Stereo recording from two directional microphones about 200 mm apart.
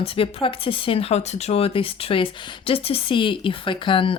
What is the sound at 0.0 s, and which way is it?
Speech, 30° left (ahead or behind).